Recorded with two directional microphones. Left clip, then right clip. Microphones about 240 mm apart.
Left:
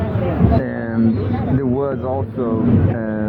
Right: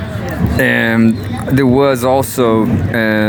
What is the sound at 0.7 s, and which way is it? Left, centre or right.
Speech, right.